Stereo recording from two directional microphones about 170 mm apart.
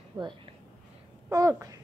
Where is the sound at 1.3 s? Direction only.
20° right (ahead or behind).